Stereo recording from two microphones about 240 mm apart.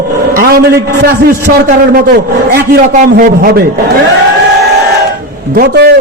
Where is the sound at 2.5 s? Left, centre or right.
Right.